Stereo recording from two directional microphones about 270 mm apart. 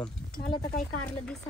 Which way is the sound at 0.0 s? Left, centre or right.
Centre.